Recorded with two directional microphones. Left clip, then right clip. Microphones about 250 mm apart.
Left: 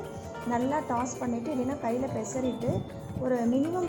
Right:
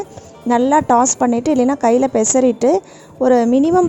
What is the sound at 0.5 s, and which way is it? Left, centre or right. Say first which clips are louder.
A woman's voice: right 17 dB; right.